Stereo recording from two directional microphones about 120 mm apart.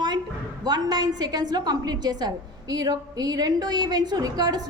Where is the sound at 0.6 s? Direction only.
35° right (ahead or behind).